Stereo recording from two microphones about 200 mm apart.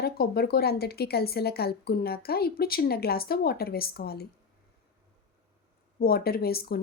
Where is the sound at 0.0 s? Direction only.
50° left (ahead or behind).